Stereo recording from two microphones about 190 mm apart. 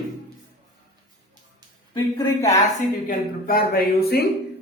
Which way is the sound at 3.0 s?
50° left (ahead or behind).